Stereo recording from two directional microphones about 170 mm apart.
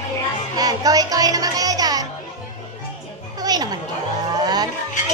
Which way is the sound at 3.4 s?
25° right (ahead or behind).